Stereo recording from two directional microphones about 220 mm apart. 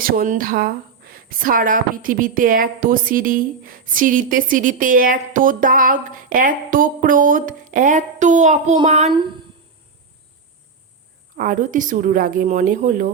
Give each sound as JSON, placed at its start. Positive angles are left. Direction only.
{"t": 0.0, "sound": "speech", "side_deg": -40}
{"t": 11.3, "sound": "speech", "side_deg": -35}